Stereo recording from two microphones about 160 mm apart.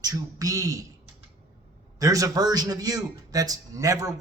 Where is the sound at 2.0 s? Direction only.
20° right (ahead or behind).